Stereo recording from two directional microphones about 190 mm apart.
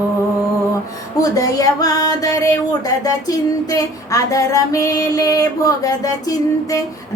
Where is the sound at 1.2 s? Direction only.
20° left (ahead or behind).